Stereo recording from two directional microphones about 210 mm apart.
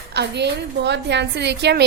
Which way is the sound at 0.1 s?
55° right (ahead or behind).